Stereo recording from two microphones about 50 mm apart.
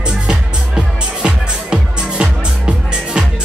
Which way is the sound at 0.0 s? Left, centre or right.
Centre.